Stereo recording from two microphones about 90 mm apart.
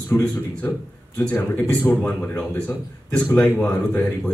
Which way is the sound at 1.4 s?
15° left (ahead or behind).